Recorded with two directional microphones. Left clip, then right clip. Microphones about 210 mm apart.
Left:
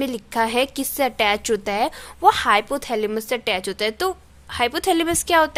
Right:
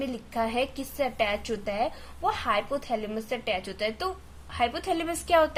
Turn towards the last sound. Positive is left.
turn(degrees=40)  # may be behind; listen again after turning